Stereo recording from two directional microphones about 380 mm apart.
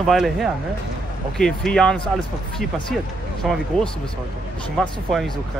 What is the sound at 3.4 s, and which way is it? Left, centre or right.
Speech, centre.